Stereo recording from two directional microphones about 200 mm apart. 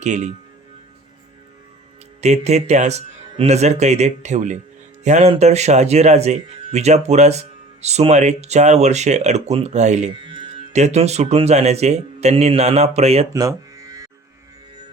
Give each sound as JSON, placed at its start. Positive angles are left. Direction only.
{"t": 0.0, "sound": "speech", "side_deg": -35}
{"t": 2.2, "sound": "speech", "side_deg": -35}
{"t": 10.1, "sound": "music", "side_deg": -25}
{"t": 10.7, "sound": "speech", "side_deg": -35}
{"t": 13.3, "sound": "music", "side_deg": -15}